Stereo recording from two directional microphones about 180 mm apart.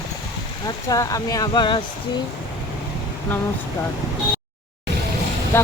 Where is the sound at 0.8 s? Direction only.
20° left (ahead or behind).